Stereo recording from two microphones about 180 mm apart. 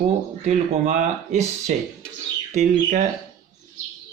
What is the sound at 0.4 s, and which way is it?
Speech, 40° right (ahead or behind).